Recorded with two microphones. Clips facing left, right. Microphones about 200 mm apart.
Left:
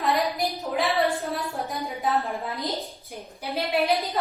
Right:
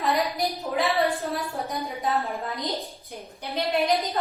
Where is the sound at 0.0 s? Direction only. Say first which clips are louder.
Even; centre (ahead or behind).